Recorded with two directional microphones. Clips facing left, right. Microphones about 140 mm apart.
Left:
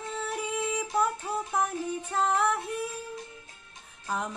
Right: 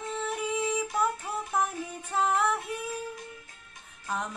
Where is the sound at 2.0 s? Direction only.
Centre (ahead or behind).